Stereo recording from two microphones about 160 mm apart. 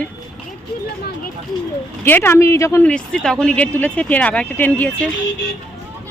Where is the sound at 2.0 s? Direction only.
15° left (ahead or behind).